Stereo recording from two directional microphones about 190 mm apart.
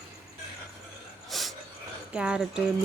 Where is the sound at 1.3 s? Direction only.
Centre (ahead or behind).